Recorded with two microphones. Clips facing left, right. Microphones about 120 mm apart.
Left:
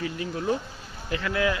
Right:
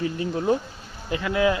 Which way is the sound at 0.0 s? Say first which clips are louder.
Right 4 dB; 30° right (ahead or behind).